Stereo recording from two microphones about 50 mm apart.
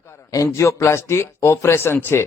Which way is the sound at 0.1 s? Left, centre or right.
Left.